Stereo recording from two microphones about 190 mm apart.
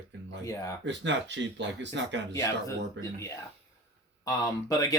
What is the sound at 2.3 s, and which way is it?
Speech, 15° left (ahead or behind).